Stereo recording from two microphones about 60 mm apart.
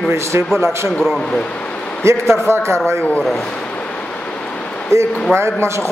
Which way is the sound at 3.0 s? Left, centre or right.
Left.